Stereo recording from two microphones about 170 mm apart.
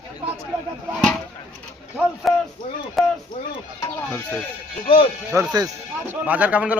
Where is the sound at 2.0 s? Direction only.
5° right (ahead or behind).